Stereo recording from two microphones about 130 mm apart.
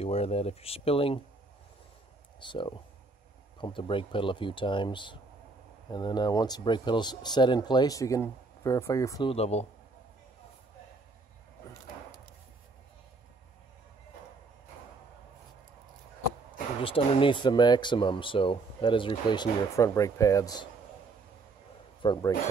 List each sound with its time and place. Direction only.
0.0 s speech: 50° left (ahead or behind)
2.4 s speech: 40° left (ahead or behind)
9.3 s speech: 55° left (ahead or behind)
16.8 s speech: 45° left (ahead or behind)
19.8 s speech: 25° left (ahead or behind)
22.0 s speech: 35° left (ahead or behind)